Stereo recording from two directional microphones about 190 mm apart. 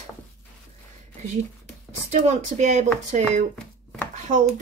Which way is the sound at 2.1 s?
40° right (ahead or behind).